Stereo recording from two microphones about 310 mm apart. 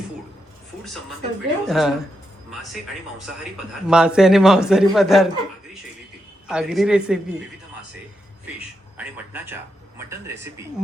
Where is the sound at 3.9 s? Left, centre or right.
Centre.